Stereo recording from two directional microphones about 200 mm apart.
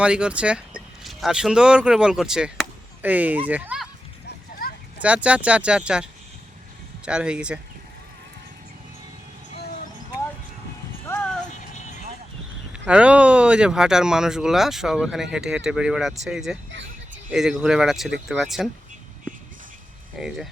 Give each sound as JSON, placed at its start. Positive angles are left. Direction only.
{"t": 0.0, "sound": "speech", "side_deg": -5}
{"t": 5.0, "sound": "speech", "side_deg": -5}
{"t": 11.8, "sound": "vehicle", "side_deg": 35}
{"t": 12.7, "sound": "speech", "side_deg": -5}
{"t": 20.1, "sound": "speech", "side_deg": 0}